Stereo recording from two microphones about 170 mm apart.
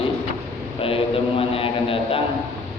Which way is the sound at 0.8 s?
35° left (ahead or behind).